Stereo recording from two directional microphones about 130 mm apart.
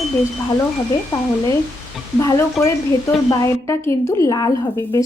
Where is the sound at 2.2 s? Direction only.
20° left (ahead or behind).